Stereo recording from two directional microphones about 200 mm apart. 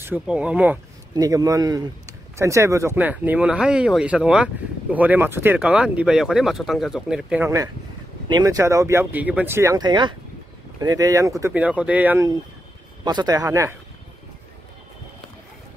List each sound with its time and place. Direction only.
0.0 s speech: 5° right (ahead or behind)
1.1 s speech: 15° right (ahead or behind)